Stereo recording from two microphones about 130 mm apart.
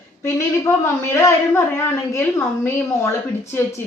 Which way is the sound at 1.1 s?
20° left (ahead or behind).